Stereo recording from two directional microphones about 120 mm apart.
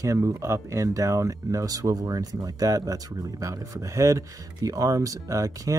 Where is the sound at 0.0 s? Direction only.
25° right (ahead or behind).